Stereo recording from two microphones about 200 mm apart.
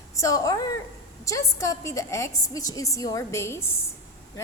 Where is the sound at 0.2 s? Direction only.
15° left (ahead or behind).